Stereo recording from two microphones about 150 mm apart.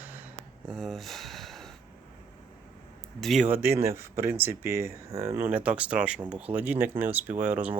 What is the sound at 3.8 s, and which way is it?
Speech, 15° right (ahead or behind).